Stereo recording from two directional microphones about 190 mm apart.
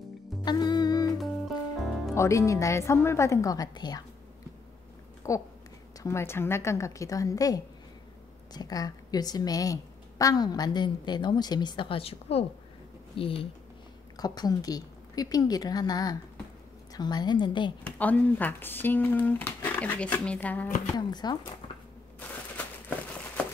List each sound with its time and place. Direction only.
0.5 s music: 20° left (ahead or behind)
1.8 s music: centre (ahead or behind)
2.1 s speech: 15° left (ahead or behind)
5.2 s a woman's voice: 15° left (ahead or behind)
17.8 s speech: 10° left (ahead or behind)
21.1 s a woman's voice: 20° left (ahead or behind)
22.6 s a sound: 10° left (ahead or behind)